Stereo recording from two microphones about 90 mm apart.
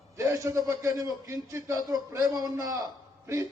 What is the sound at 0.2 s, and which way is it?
Speech, 35° right (ahead or behind).